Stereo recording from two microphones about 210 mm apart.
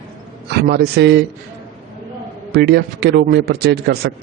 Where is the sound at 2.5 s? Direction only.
55° right (ahead or behind).